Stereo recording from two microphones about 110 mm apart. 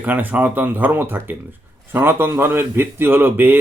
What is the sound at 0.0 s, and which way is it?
A man's voice, 15° right (ahead or behind).